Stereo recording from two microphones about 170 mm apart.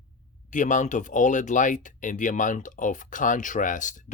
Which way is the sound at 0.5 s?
50° left (ahead or behind).